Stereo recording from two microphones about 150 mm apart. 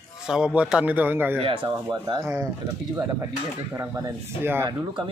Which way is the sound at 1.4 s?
35° right (ahead or behind).